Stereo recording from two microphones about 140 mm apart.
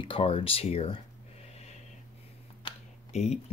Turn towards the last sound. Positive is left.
turn(degrees=50)  # may be behind; listen again after turning